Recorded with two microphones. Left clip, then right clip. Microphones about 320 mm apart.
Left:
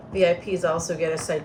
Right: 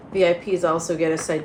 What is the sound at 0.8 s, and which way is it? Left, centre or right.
Speech, centre.